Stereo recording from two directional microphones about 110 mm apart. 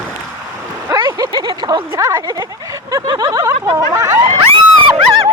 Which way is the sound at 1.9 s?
30° right (ahead or behind).